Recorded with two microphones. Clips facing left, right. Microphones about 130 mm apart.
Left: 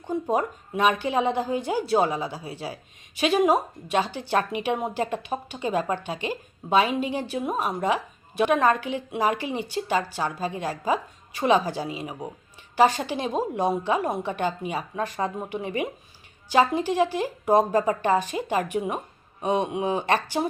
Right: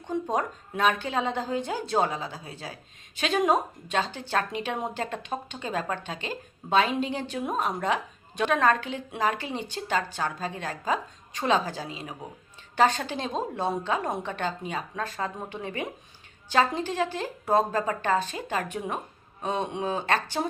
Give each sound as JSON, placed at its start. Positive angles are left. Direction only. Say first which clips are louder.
{"t": 0.1, "sound": "a woman's voice", "louder": "left 3 dB", "side_deg": 5}